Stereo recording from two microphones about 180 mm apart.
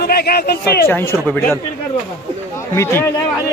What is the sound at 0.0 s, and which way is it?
Speech, 60° left (ahead or behind).